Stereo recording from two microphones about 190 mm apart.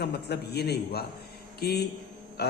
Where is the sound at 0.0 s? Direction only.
60° left (ahead or behind).